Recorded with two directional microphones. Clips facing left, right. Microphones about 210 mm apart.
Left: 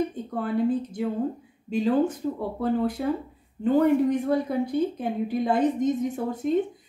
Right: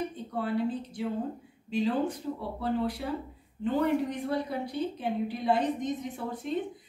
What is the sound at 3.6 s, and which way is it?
A woman's voice, 45° left (ahead or behind).